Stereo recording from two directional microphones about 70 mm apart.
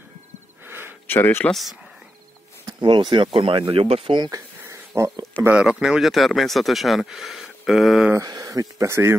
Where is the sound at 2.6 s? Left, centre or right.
Right.